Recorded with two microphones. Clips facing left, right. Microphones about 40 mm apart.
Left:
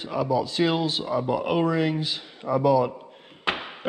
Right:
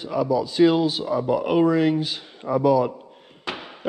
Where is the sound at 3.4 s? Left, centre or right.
Left.